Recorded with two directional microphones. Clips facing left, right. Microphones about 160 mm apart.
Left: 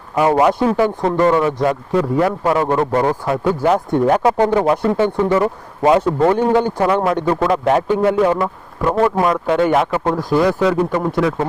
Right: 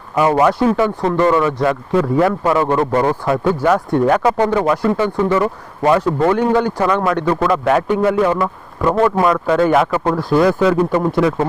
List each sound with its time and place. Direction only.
0.2 s a man's voice: 20° left (ahead or behind)
4.2 s a man's voice: 10° left (ahead or behind)
4.6 s a man's voice: 25° left (ahead or behind)
9.0 s a man's voice: 15° left (ahead or behind)
10.3 s speech: centre (ahead or behind)